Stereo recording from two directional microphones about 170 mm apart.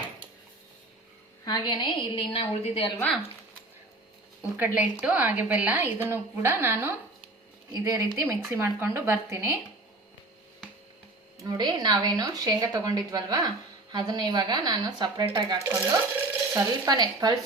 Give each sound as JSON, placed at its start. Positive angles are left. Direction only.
{"t": 1.5, "sound": "a woman's voice", "side_deg": 25}
{"t": 4.5, "sound": "a woman's voice", "side_deg": -10}
{"t": 11.4, "sound": "speech", "side_deg": -25}